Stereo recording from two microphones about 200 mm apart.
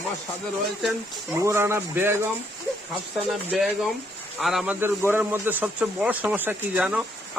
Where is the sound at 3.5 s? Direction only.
Centre (ahead or behind).